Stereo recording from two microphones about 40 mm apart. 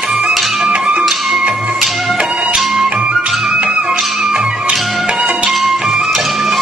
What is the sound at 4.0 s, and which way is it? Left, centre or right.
Music, centre.